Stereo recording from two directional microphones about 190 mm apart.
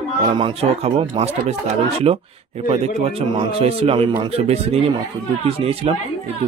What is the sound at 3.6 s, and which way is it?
A man's voice, 30° right (ahead or behind).